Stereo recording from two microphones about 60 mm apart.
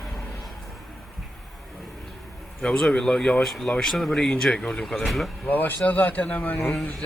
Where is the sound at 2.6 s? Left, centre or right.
Centre.